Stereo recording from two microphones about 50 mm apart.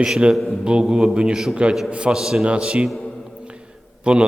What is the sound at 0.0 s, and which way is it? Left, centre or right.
A man's voice, centre.